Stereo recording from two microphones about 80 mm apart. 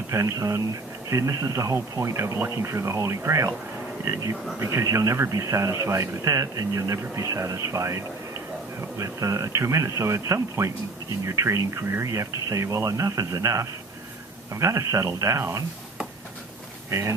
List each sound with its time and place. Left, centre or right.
0.1 s speech: right
16.9 s speech: right